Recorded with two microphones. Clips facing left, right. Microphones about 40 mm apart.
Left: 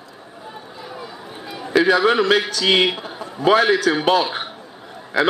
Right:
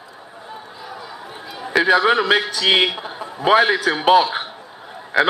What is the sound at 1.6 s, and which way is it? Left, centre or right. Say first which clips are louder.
A man's voice: even; centre.